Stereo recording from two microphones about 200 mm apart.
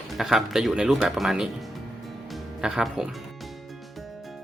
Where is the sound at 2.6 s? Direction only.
5° right (ahead or behind).